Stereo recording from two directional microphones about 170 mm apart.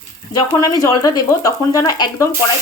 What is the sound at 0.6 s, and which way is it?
Speech, 20° left (ahead or behind).